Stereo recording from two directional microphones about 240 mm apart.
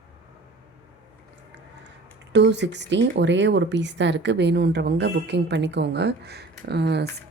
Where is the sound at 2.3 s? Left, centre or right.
Right.